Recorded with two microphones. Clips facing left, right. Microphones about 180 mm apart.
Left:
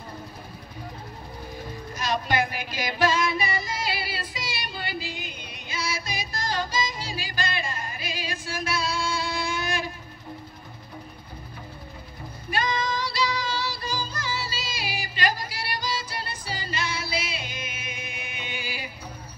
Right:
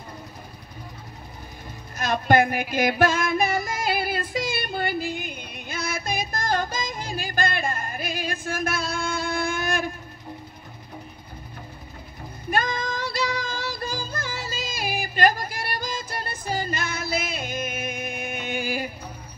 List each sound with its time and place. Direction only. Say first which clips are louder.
2.0 s female singing: right 6 dB; 50° right (ahead or behind)
12.4 s music: right 1 dB; 50° right (ahead or behind)